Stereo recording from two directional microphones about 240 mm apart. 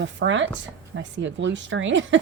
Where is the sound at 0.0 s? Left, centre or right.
Right.